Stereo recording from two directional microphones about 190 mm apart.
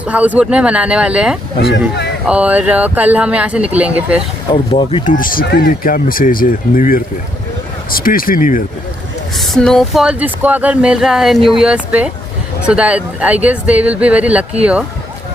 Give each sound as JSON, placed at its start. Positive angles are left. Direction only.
{"t": 0.1, "sound": "speech", "side_deg": -5}
{"t": 4.5, "sound": "speech", "side_deg": 30}
{"t": 5.0, "sound": "speech", "side_deg": 45}
{"t": 9.4, "sound": "speech", "side_deg": 0}